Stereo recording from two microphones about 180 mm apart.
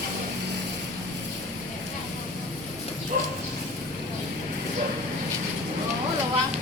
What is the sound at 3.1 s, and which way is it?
Bird, 45° right (ahead or behind).